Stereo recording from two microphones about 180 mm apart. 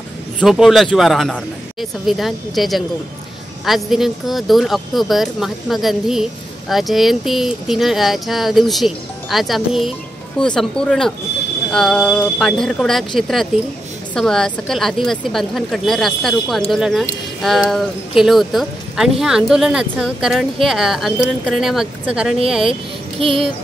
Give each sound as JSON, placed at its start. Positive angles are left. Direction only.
{"t": 0.4, "sound": "speech", "side_deg": 0}
{"t": 22.7, "sound": "child singing", "side_deg": -30}